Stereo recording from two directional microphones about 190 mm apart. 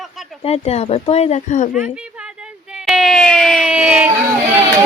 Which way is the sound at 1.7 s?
5° right (ahead or behind).